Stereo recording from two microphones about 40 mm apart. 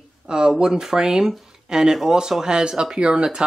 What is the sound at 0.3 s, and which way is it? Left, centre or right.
Speech, right.